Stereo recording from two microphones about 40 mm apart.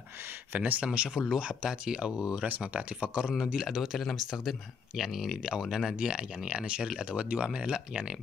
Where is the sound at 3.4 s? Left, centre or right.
Centre.